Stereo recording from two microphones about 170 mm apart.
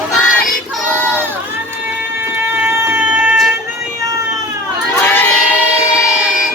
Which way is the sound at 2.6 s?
15° right (ahead or behind).